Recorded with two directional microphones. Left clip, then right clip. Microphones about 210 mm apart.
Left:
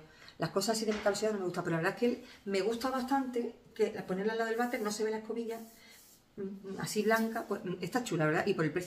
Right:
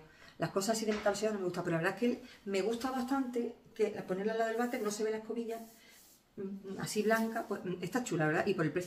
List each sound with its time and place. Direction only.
0.4 s speech: 5° left (ahead or behind)
6.8 s speech: centre (ahead or behind)